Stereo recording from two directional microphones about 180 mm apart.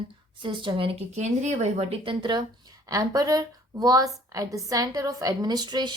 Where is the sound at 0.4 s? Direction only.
25° right (ahead or behind).